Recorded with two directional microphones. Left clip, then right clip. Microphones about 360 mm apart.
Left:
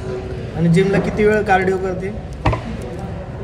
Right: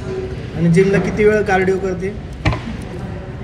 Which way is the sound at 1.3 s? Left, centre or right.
Left.